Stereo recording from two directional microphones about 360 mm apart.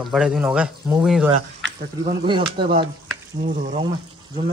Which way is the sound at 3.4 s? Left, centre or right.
Right.